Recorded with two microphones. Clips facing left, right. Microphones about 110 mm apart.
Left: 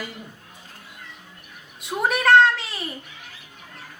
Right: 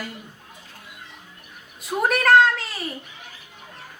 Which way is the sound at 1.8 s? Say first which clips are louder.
Right 1 dB; centre (ahead or behind).